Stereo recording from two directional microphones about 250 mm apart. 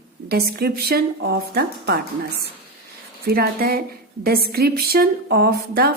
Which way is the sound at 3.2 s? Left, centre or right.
Right.